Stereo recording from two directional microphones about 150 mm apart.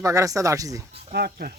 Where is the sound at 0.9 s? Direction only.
90° right.